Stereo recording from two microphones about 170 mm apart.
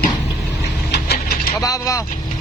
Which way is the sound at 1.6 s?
20° left (ahead or behind).